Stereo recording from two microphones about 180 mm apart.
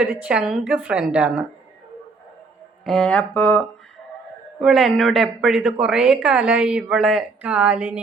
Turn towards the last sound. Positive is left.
turn(degrees=-10)  # may be behind; listen again after turning